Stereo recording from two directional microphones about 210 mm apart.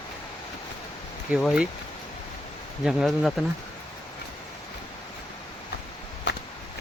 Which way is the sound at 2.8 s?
Centre (ahead or behind).